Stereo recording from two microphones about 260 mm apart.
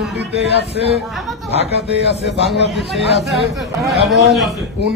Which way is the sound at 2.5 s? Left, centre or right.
Centre.